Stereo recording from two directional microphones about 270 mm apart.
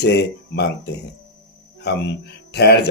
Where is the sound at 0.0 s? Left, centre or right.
Left.